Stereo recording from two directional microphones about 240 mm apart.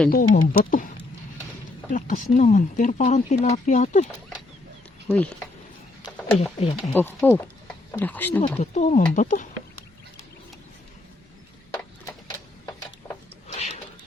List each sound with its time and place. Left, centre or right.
0.1 s speech: left
5.0 s speech: centre
6.6 s speech: left
6.9 s speech: centre
8.4 s speech: left
13.5 s a sound: left